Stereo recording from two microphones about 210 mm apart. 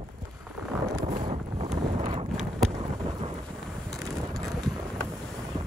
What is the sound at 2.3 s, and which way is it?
Vehicle, centre (ahead or behind).